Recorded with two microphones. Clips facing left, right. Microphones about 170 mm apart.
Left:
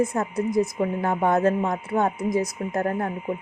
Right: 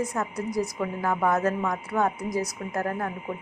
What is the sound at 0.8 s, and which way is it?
A woman's voice, 30° left (ahead or behind).